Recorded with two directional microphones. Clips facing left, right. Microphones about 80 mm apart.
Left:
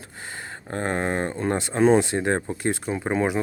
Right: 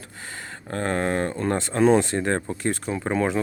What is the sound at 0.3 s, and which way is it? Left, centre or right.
Speech, left.